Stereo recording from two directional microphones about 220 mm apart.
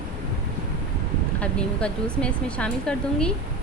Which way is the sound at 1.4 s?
5° left (ahead or behind).